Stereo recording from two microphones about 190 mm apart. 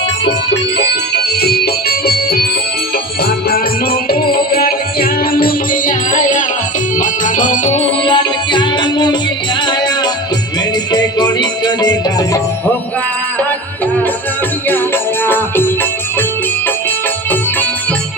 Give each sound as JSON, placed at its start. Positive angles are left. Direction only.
{"t": 0.3, "sound": "music", "side_deg": 65}
{"t": 4.1, "sound": "music", "side_deg": 50}
{"t": 8.0, "sound": "music", "side_deg": 25}
{"t": 15.3, "sound": "music", "side_deg": 10}